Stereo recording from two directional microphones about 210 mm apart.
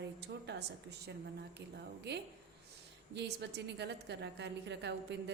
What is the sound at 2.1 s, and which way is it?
A woman's voice, 55° right (ahead or behind).